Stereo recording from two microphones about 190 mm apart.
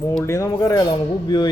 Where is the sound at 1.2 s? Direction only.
20° left (ahead or behind).